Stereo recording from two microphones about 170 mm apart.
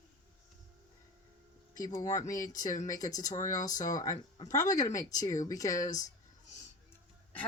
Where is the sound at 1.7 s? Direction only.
20° left (ahead or behind).